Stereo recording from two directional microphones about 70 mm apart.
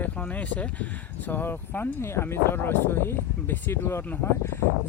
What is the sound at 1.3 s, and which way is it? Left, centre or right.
Speech, left.